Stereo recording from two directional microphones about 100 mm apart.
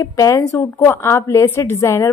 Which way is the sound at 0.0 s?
35° left (ahead or behind).